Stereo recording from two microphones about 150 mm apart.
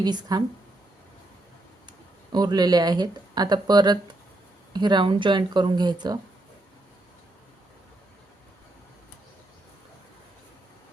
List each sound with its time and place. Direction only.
0.0 s speech: 30° right (ahead or behind)
1.9 s speech: 25° right (ahead or behind)